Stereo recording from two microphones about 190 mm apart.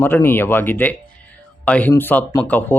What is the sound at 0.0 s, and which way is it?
Speech, 10° left (ahead or behind).